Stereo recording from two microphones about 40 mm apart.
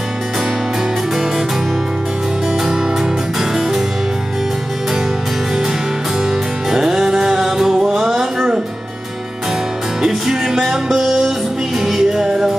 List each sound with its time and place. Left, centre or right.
3.3 s music: centre
6.7 s music: centre
10.0 s music: centre